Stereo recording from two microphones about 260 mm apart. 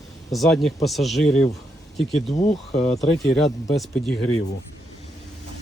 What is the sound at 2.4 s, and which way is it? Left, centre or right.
Speech, left.